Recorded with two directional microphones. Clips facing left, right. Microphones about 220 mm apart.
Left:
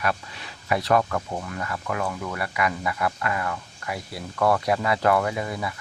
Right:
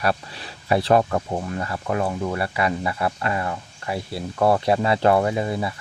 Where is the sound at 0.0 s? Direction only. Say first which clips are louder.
Right 4 dB; 35° right (ahead or behind).